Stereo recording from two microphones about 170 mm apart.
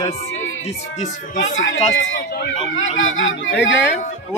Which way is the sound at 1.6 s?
85° left.